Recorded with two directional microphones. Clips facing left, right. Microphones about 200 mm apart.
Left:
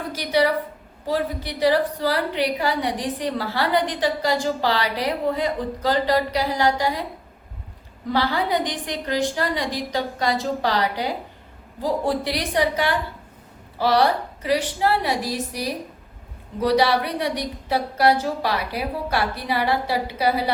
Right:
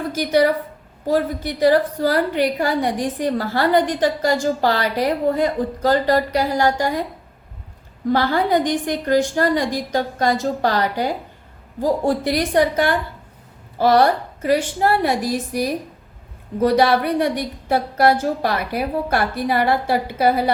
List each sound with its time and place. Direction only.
0.1 s a woman's voice: 45° right (ahead or behind)
8.1 s a woman's voice: 50° right (ahead or behind)